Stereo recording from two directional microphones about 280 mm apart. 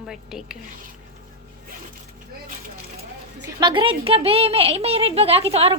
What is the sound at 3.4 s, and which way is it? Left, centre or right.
Speech, centre.